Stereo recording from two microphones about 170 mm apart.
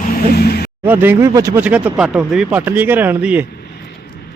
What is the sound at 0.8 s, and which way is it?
Speech, 10° right (ahead or behind).